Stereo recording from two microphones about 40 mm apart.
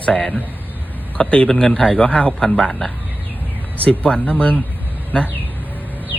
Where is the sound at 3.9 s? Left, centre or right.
Left.